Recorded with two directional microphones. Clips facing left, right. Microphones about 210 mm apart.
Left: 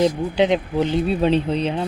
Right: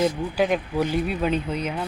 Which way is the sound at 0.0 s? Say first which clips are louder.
Left 4 dB; 25° left (ahead or behind).